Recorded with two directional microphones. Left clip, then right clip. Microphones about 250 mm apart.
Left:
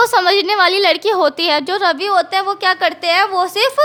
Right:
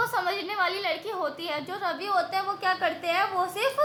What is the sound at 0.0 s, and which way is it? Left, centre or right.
A woman's voice, left.